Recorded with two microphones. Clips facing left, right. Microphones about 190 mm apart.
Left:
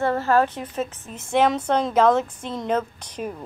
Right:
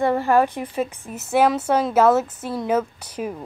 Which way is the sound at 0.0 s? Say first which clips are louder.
Right 2 dB; 15° right (ahead or behind).